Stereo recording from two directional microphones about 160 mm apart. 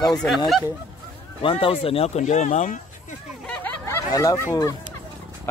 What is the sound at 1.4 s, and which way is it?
Speech, 35° left (ahead or behind).